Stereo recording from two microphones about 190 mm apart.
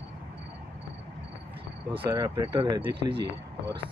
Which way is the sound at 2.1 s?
20° right (ahead or behind).